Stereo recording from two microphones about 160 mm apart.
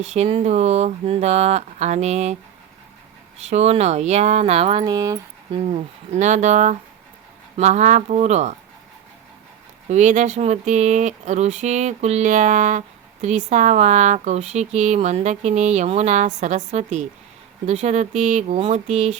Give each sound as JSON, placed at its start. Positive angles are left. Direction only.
{"t": 0.0, "sound": "speech", "side_deg": -45}
{"t": 3.5, "sound": "speech", "side_deg": -45}
{"t": 4.9, "sound": "speech", "side_deg": -20}
{"t": 5.5, "sound": "speech", "side_deg": -40}
{"t": 9.9, "sound": "speech", "side_deg": -50}